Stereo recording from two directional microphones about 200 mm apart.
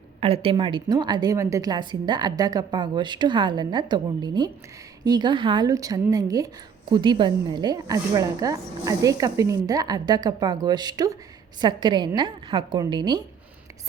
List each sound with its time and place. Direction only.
0.2 s a woman's voice: 30° right (ahead or behind)